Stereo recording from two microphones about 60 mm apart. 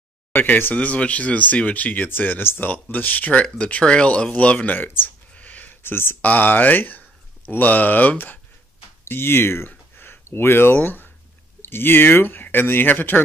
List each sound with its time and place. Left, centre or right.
0.3 s speech: left
4.7 s speech: left
5.3 s a sound: left
5.8 s speech: left
9.0 s speech: left
9.7 s a sound: left
11.6 s speech: left